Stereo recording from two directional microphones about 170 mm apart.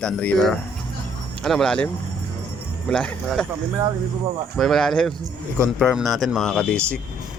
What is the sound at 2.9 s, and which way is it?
Speech, 5° left (ahead or behind).